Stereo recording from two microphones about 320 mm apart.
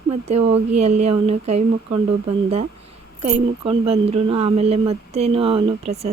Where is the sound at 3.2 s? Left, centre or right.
Centre.